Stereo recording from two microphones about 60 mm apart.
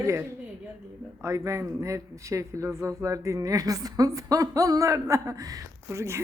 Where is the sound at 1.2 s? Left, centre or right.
Right.